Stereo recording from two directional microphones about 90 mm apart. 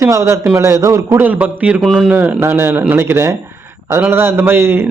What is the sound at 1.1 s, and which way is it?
Speech, 20° right (ahead or behind).